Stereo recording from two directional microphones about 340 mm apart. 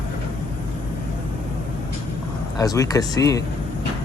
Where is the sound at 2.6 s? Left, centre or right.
Centre.